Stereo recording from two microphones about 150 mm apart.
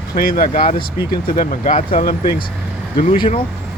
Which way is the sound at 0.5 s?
45° left (ahead or behind).